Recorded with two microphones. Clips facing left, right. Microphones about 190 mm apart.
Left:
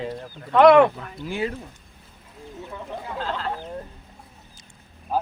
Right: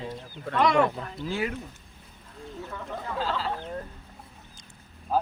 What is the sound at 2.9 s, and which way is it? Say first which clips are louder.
Speech: right 1 dB; centre (ahead or behind).